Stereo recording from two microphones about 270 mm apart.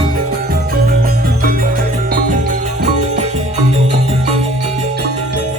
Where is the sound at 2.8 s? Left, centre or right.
Right.